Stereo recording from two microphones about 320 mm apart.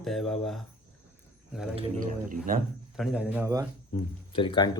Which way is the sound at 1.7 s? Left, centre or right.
Right.